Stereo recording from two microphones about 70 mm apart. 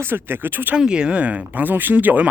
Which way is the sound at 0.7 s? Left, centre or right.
Centre.